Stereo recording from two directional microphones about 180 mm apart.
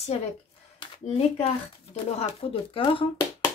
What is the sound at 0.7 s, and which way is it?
Speech, 30° left (ahead or behind).